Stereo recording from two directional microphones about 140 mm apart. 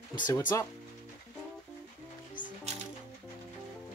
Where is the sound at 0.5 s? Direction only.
20° left (ahead or behind).